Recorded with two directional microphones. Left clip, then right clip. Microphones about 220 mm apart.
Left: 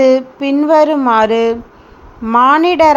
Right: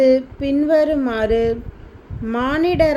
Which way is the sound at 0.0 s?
15° left (ahead or behind).